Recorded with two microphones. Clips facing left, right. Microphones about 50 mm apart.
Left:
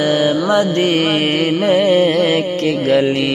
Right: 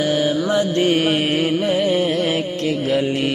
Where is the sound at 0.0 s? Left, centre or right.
Left.